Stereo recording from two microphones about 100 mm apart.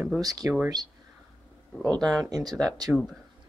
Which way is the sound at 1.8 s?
5° left (ahead or behind).